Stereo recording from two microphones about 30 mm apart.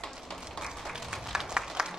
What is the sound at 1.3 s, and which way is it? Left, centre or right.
Applause, right.